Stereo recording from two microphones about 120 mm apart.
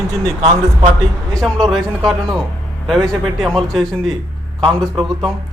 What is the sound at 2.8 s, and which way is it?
Speech, centre (ahead or behind).